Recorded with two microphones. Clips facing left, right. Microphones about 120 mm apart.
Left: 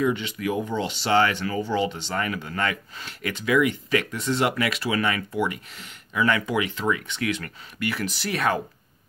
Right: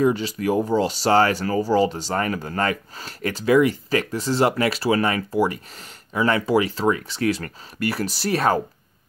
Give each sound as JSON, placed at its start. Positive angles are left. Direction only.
{"t": 0.0, "sound": "speech", "side_deg": -35}